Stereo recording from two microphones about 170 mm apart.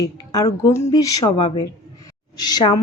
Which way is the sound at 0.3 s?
20° left (ahead or behind).